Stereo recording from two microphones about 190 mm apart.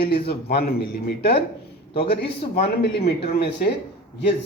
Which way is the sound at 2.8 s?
60° left (ahead or behind).